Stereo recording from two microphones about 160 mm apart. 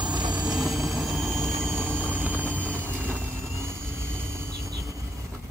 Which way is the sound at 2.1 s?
10° right (ahead or behind).